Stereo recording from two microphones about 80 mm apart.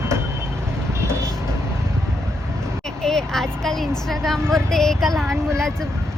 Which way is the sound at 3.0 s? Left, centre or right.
Centre.